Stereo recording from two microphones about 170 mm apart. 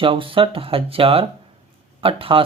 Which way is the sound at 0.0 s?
30° right (ahead or behind).